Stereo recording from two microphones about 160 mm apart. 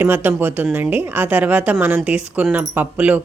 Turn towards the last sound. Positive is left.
turn(degrees=-10)  # may be behind; listen again after turning